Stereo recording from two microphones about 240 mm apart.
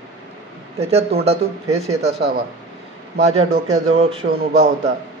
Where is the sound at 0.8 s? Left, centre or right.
Right.